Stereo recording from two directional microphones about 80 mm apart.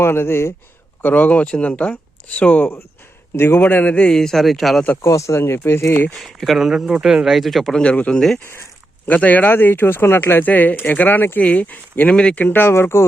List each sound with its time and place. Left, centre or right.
0.0 s speech: left
1.0 s speech: centre
5.0 s speech: left
6.1 s speech: centre
7.8 s speech: centre
9.0 s speech: centre